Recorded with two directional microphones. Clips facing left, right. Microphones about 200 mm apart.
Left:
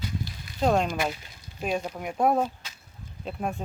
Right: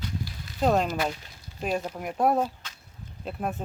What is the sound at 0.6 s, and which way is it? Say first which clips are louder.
Speech: even; centre (ahead or behind).